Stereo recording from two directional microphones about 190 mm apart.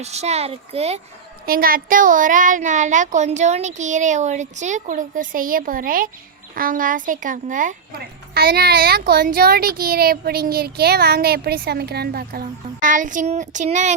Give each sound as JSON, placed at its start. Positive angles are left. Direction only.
{"t": 0.0, "sound": "speech", "side_deg": -35}
{"t": 1.5, "sound": "speech", "side_deg": -50}